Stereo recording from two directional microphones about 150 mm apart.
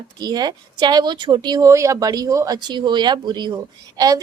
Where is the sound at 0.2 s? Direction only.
30° right (ahead or behind).